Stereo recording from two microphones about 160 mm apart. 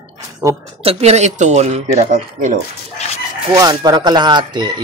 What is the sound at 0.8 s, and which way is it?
Speech, 45° right (ahead or behind).